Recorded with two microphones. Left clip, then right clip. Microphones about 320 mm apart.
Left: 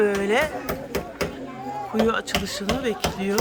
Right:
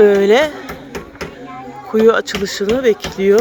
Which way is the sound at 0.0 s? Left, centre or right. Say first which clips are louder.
Right 11 dB; centre.